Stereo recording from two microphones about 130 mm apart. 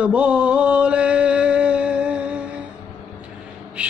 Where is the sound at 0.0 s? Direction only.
10° right (ahead or behind).